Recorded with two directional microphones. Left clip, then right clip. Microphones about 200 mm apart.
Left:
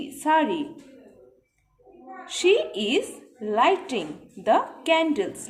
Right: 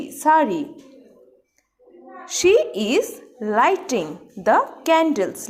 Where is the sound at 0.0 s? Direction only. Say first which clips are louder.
Right 5 dB; 25° right (ahead or behind).